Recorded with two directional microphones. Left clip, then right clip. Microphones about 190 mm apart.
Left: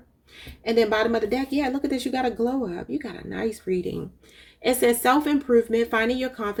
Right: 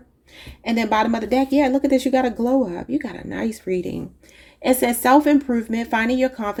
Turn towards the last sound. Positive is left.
turn(degrees=-30)  # may be behind; listen again after turning